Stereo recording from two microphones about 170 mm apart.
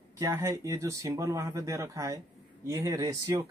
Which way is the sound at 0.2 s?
15° right (ahead or behind).